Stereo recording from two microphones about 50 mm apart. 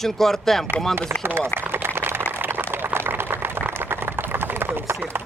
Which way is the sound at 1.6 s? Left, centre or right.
Right.